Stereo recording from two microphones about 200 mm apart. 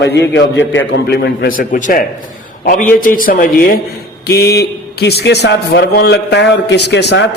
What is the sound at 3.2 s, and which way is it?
A man's voice, 45° left (ahead or behind).